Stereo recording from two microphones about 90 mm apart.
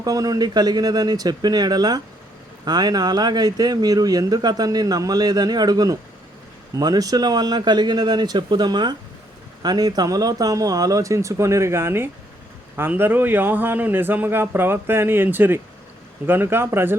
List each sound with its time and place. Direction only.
0.0 s a man's voice: 40° right (ahead or behind); by 17.0 s 25° right (ahead or behind)